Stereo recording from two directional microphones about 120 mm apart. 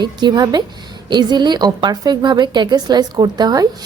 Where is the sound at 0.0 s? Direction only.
40° right (ahead or behind).